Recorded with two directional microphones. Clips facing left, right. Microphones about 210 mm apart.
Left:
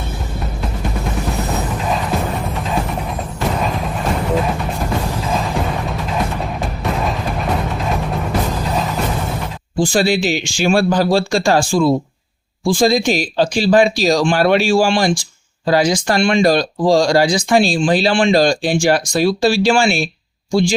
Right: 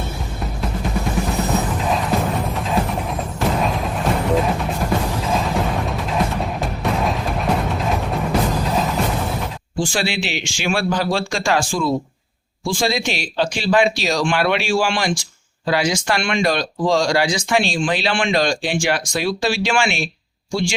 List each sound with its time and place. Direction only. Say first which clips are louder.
3.6 s music: even; centre (ahead or behind)
9.7 s speech: left 7 dB; 40° left (ahead or behind)